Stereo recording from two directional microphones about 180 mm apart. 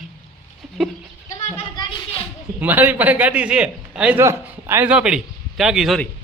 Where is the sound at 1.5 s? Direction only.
25° left (ahead or behind).